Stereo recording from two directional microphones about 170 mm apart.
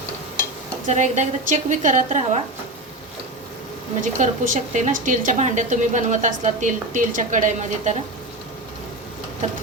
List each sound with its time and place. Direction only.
0.9 s a woman's voice: 45° right (ahead or behind)
4.0 s a woman's voice: 50° right (ahead or behind)